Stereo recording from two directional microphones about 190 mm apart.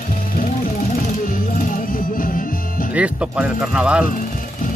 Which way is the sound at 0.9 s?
45° left (ahead or behind).